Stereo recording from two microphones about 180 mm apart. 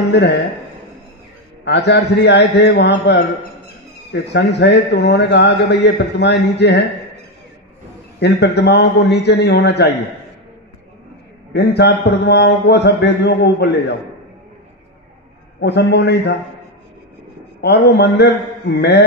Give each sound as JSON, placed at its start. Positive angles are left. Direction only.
{"t": 1.6, "sound": "a man's voice", "side_deg": 70}
{"t": 8.2, "sound": "a man's voice", "side_deg": 70}
{"t": 11.5, "sound": "a man's voice", "side_deg": 65}
{"t": 15.6, "sound": "a man's voice", "side_deg": 70}
{"t": 17.6, "sound": "a man's voice", "side_deg": 65}